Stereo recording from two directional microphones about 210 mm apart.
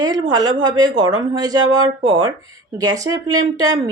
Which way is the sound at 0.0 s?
20° right (ahead or behind).